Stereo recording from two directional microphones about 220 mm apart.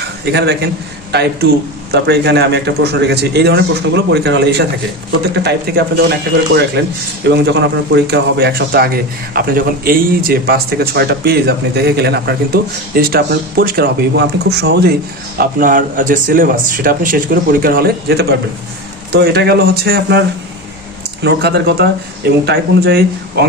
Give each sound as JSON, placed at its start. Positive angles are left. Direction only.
{"t": 0.3, "sound": "a man's voice", "side_deg": -50}